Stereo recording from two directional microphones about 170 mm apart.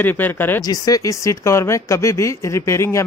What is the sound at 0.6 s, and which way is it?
Speech, 20° left (ahead or behind).